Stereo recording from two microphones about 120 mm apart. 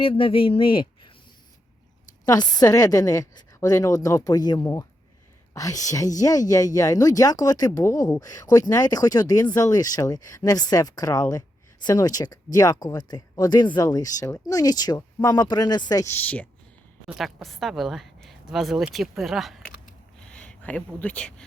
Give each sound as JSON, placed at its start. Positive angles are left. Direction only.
{"t": 0.0, "sound": "speech", "side_deg": 50}
{"t": 2.2, "sound": "a woman's voice", "side_deg": 30}
{"t": 16.0, "sound": "a woman's voice", "side_deg": 15}
{"t": 17.2, "sound": "speech", "side_deg": 0}
{"t": 20.1, "sound": "a sound", "side_deg": 10}